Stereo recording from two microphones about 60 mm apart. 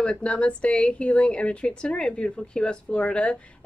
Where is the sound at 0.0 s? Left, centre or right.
Centre.